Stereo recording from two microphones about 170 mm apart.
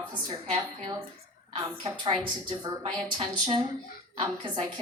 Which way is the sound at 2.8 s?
35° right (ahead or behind).